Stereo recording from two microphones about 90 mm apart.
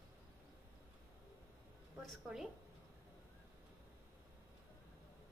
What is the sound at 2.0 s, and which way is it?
Speech, centre (ahead or behind).